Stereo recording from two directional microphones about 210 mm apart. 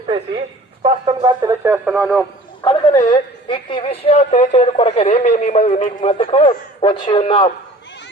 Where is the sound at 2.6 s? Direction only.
25° left (ahead or behind).